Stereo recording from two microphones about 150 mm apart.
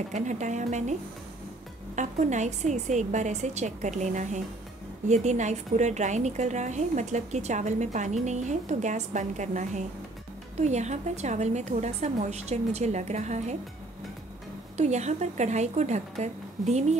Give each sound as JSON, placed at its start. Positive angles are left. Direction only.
{"t": 0.1, "sound": "a woman's voice", "side_deg": -55}
{"t": 2.0, "sound": "a woman's voice", "side_deg": -50}
{"t": 14.8, "sound": "a woman's voice", "side_deg": -50}